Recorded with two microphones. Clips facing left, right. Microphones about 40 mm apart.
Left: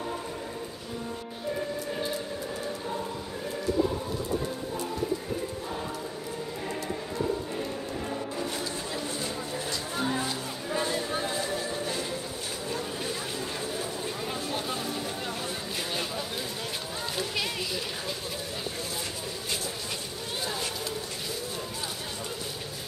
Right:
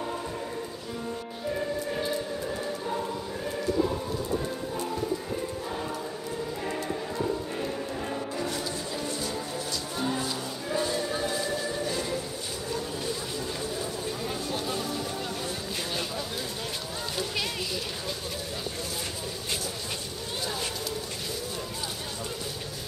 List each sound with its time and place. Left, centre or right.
2.6 s choir: centre
3.8 s pigeon: centre
6.6 s music: centre
9.2 s music: centre
13.6 s a sound: centre